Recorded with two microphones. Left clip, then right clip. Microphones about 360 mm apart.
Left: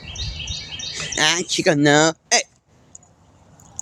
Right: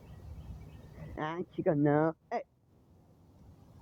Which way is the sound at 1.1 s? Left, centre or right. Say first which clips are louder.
Left 18 dB; right.